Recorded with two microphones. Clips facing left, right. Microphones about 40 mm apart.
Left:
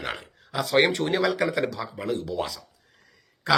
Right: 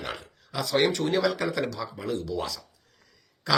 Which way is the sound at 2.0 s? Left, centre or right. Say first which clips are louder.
Left 3 dB; left.